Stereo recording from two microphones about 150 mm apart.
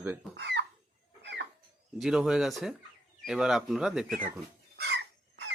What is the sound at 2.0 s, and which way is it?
Speech, 5° right (ahead or behind).